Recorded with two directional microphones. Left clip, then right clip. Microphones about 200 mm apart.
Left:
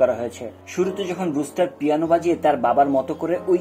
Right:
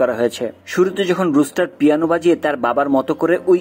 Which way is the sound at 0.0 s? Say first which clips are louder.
Right 3 dB; 25° right (ahead or behind).